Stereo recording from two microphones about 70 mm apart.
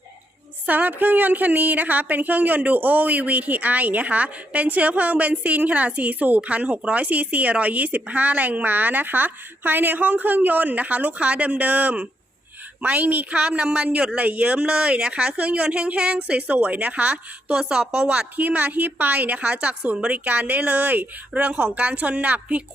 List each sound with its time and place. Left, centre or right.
0.6 s a woman's voice: right
17.5 s a woman's voice: centre